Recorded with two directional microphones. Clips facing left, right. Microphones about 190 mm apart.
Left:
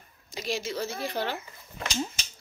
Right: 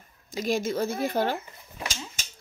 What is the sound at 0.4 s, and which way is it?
Speech, 50° right (ahead or behind).